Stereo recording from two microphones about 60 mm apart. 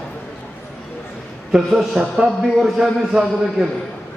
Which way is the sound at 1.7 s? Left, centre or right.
Centre.